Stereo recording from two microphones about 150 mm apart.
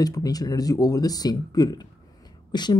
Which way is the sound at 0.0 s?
25° left (ahead or behind).